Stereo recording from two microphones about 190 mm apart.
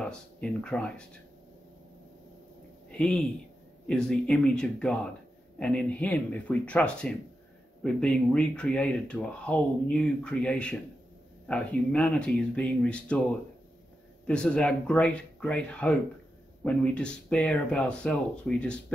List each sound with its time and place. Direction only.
0.0 s speech: 5° left (ahead or behind)
2.9 s speech: 5° left (ahead or behind)
14.2 s speech: 5° left (ahead or behind)